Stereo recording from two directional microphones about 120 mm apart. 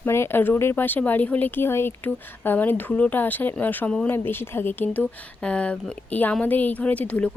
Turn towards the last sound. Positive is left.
turn(degrees=10)  # may be behind; listen again after turning